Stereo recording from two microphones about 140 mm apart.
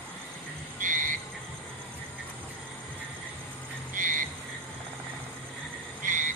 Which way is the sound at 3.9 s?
70° right (ahead or behind).